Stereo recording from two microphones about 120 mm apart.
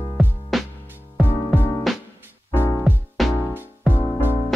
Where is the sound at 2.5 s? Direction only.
20° left (ahead or behind).